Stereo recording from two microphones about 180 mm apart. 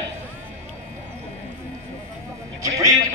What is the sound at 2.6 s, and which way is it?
Speech, 15° right (ahead or behind).